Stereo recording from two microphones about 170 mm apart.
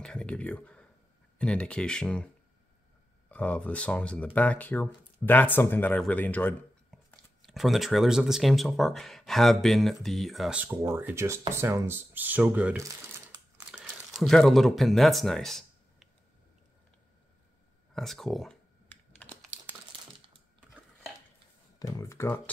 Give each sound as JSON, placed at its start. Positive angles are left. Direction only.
{"t": 0.0, "sound": "a sound", "side_deg": 5}
{"t": 1.4, "sound": "speech", "side_deg": 5}
{"t": 3.3, "sound": "speech", "side_deg": 10}
{"t": 13.7, "sound": "a sound", "side_deg": 0}
{"t": 17.9, "sound": "computer keyboard", "side_deg": 0}
{"t": 21.7, "sound": "speech", "side_deg": 20}